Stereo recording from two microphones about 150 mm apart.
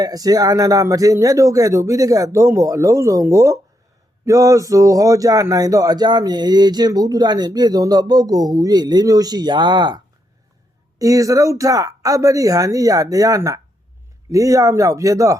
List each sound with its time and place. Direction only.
0.0 s speech: 25° right (ahead or behind)